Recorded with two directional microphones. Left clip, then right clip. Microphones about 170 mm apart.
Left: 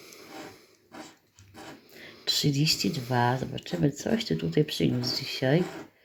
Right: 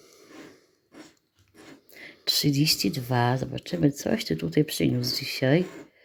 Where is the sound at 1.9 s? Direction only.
40° right (ahead or behind).